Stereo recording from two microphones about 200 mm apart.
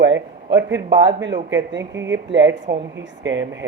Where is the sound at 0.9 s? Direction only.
20° right (ahead or behind).